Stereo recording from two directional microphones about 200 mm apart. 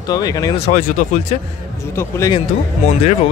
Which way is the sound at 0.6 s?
35° left (ahead or behind).